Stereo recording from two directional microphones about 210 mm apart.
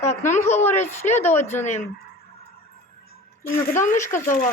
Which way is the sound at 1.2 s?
10° left (ahead or behind).